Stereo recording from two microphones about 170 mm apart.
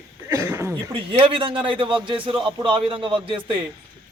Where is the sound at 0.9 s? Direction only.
30° right (ahead or behind).